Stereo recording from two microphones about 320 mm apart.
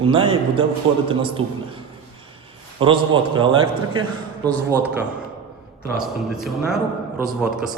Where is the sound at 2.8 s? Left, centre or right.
Centre.